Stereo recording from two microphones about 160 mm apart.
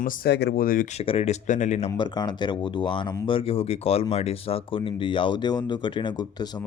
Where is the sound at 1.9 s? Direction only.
25° left (ahead or behind).